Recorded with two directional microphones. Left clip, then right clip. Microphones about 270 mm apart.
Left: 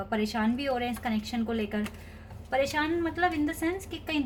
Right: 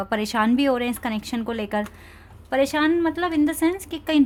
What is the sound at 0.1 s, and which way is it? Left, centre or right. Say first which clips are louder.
A woman's voice: right 8 dB; right.